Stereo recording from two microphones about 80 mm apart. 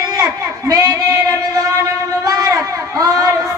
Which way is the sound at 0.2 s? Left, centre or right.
Right.